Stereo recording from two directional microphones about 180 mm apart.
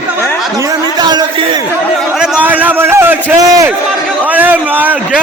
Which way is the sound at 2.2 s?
10° right (ahead or behind).